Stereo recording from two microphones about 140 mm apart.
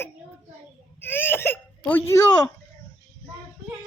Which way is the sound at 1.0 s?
15° left (ahead or behind).